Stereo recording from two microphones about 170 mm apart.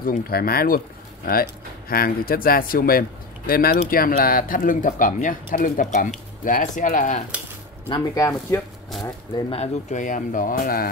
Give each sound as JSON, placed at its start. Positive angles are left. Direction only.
{"t": 0.0, "sound": "speech", "side_deg": 60}
{"t": 7.2, "sound": "cutlery", "side_deg": -10}
{"t": 7.9, "sound": "speech", "side_deg": 20}
{"t": 8.9, "sound": "speech", "side_deg": 0}
{"t": 9.3, "sound": "speech", "side_deg": 35}
{"t": 9.8, "sound": "speech", "side_deg": 50}